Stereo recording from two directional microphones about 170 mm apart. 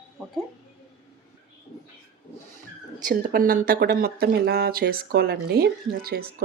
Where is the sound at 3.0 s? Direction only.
55° right (ahead or behind).